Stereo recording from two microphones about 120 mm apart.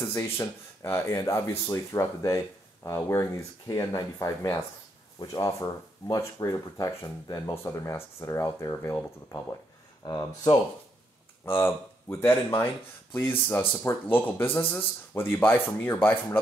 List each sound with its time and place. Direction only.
0.0 s speech: 20° left (ahead or behind)
10.0 s speech: 30° left (ahead or behind)
11.4 s speech: 20° left (ahead or behind)